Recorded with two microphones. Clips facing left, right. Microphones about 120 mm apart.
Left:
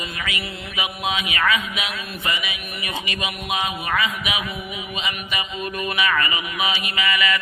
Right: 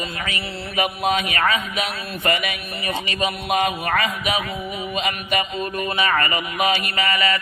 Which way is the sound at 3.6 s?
50° right (ahead or behind).